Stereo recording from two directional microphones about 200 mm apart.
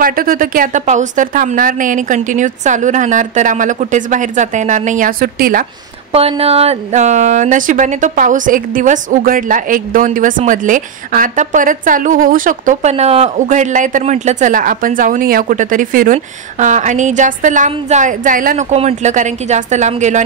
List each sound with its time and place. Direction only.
0.0 s speech: 45° right (ahead or behind)
6.1 s speech: 30° right (ahead or behind)